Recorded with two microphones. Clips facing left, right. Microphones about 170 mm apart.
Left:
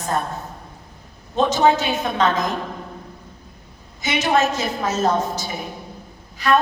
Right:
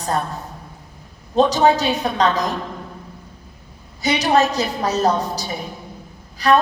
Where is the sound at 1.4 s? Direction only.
35° right (ahead or behind).